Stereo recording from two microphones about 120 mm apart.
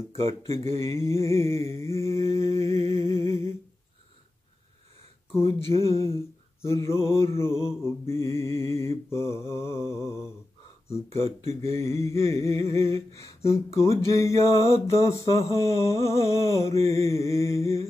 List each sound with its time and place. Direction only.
0.2 s mantra: 25° left (ahead or behind)
3.1 s humming: 25° left (ahead or behind)
5.5 s mantra: 25° left (ahead or behind)
11.4 s mantra: 25° left (ahead or behind)